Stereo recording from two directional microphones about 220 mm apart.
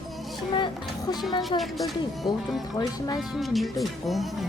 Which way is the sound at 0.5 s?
20° left (ahead or behind).